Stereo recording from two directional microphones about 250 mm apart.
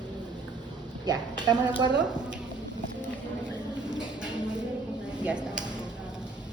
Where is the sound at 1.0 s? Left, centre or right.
Centre.